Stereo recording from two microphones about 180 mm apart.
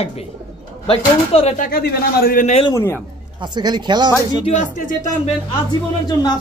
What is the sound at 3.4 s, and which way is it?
Speech, 25° right (ahead or behind).